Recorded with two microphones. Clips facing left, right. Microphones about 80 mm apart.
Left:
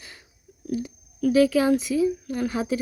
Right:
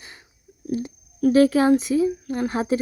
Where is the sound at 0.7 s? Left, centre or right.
Right.